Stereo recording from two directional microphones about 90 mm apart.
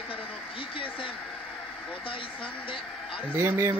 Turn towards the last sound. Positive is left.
turn(degrees=-25)  # may be behind; listen again after turning